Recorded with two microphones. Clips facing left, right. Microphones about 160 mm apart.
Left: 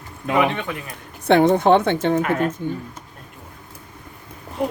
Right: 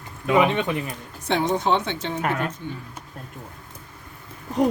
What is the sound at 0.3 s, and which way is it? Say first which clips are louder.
Speech: right 1 dB; 20° right (ahead or behind).